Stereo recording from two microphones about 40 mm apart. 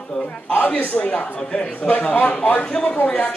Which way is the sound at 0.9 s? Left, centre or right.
Left.